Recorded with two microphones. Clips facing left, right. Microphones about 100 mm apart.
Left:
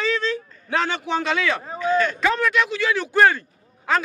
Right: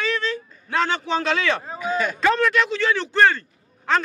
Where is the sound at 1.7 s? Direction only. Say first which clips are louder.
Left 3 dB; 10° right (ahead or behind).